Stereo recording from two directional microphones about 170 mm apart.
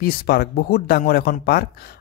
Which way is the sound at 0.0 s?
65° left (ahead or behind).